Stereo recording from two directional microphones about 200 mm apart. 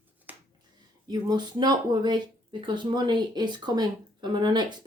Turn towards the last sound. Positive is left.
turn(degrees=-25)  # may be behind; listen again after turning